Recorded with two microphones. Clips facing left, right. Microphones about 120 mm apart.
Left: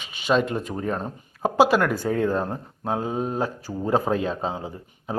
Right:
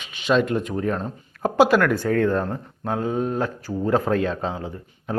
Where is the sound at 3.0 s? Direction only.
30° left (ahead or behind).